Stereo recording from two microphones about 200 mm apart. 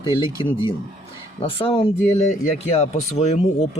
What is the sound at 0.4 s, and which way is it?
Speech, 25° left (ahead or behind).